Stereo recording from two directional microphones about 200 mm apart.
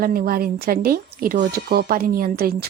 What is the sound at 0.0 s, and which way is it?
A woman's voice, 50° right (ahead or behind).